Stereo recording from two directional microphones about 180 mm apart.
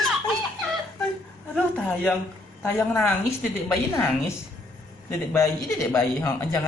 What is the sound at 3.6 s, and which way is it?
Speech, 10° left (ahead or behind).